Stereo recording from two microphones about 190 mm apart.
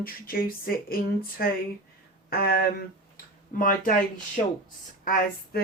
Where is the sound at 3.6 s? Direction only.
45° left (ahead or behind).